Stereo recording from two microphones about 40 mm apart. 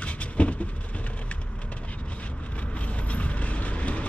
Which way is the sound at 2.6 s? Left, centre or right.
Left.